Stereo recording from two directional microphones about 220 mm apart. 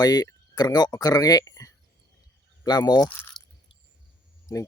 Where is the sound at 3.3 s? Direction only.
Centre (ahead or behind).